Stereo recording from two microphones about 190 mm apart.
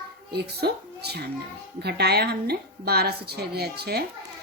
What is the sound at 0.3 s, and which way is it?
A child's voice, 60° right (ahead or behind).